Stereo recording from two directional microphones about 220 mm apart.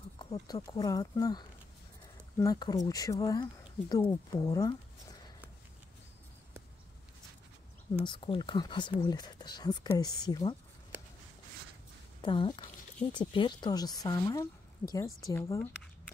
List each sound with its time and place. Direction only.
0.2 s speech: 20° left (ahead or behind)
8.0 s speech: 20° left (ahead or behind)
12.2 s speech: 20° left (ahead or behind)